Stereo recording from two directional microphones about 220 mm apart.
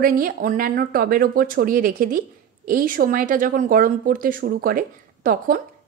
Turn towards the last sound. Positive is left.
turn(degrees=-40)  # may be behind; listen again after turning